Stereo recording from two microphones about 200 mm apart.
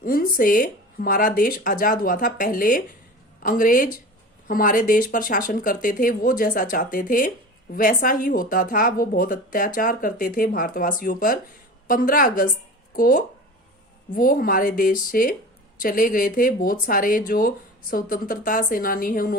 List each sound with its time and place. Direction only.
0.0 s speech: 45° left (ahead or behind)